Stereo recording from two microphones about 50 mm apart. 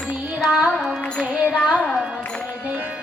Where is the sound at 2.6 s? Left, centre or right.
Right.